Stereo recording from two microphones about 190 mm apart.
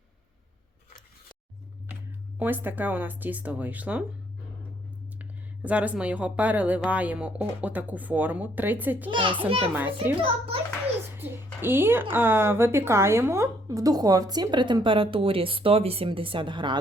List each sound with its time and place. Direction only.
2.4 s speech: 10° right (ahead or behind)
5.2 s speech: 10° right (ahead or behind)
9.1 s a woman's voice: 25° right (ahead or behind)
9.7 s speech: 10° right (ahead or behind)
10.2 s a woman's voice: 30° right (ahead or behind)
11.6 s a woman's voice: 10° right (ahead or behind)